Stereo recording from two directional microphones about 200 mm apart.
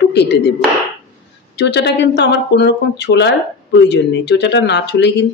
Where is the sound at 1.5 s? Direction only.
60° left (ahead or behind).